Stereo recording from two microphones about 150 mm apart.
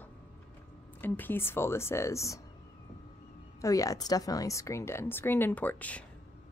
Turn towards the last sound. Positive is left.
turn(degrees=10)  # may be behind; listen again after turning